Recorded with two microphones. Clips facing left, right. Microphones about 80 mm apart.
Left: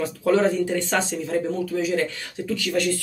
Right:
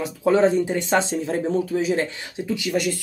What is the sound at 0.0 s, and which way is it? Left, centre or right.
Speech, right.